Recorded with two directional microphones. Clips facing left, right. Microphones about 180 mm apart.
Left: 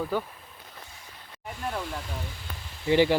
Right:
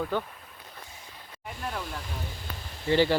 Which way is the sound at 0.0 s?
5° left (ahead or behind).